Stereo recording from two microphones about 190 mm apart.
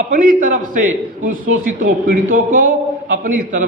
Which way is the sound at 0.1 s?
45° right (ahead or behind).